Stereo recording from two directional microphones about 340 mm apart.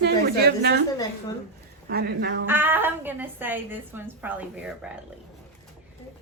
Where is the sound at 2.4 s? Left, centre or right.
Centre.